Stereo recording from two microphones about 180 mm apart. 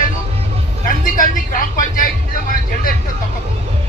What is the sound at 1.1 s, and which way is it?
Speech, 50° left (ahead or behind).